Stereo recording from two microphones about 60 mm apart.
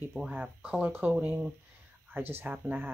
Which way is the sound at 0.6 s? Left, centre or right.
Right.